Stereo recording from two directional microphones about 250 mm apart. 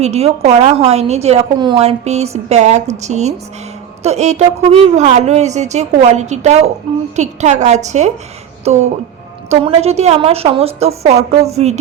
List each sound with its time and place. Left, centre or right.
0.0 s a woman's voice: right